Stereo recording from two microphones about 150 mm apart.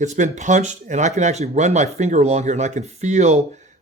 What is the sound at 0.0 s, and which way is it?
Speech, 55° right (ahead or behind).